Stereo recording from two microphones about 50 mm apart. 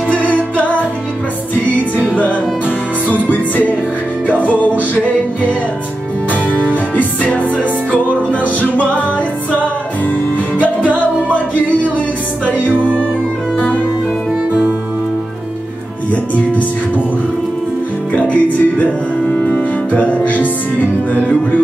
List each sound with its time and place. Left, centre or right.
0.1 s music: left
1.8 s music: right
3.1 s music: left
4.3 s music: right
4.6 s music: left
7.0 s music: left
10.8 s music: right
18.1 s music: left